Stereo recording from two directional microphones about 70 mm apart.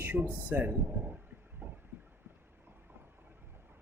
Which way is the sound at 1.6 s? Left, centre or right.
Right.